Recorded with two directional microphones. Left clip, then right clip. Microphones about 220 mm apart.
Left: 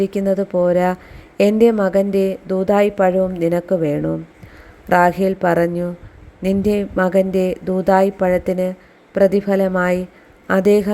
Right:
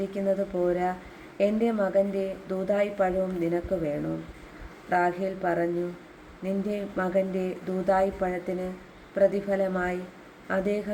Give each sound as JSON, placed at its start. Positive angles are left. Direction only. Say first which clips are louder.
{"t": 0.0, "sound": "a woman's voice", "louder": "left 9 dB", "side_deg": 45}